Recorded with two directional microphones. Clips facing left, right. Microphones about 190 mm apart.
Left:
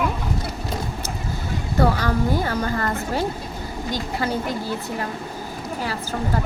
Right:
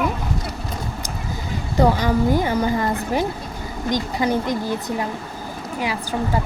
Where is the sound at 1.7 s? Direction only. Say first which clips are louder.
Right 3 dB; 15° right (ahead or behind).